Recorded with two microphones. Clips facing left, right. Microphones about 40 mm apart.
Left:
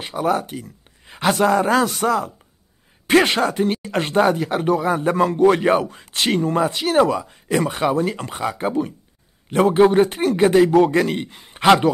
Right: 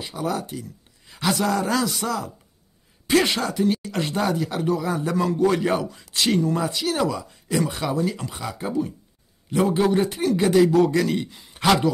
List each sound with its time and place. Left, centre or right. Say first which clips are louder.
0.0 s speech: left 6 dB; left